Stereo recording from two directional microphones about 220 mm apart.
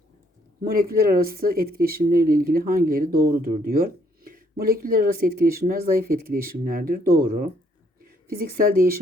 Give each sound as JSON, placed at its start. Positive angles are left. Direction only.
{"t": 0.7, "sound": "speech", "side_deg": -40}